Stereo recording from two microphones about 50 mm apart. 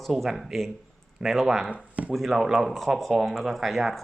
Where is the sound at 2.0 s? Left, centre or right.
Right.